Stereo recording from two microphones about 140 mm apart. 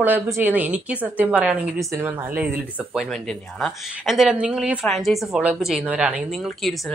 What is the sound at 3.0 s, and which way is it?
A woman's voice, centre (ahead or behind).